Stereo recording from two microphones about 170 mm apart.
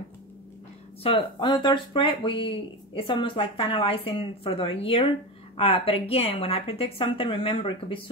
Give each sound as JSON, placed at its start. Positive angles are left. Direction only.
{"t": 1.0, "sound": "speech", "side_deg": 30}